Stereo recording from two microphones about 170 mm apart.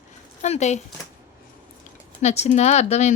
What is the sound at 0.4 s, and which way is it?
Speech, 40° left (ahead or behind).